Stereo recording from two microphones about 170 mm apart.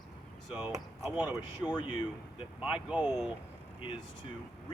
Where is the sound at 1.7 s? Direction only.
25° left (ahead or behind).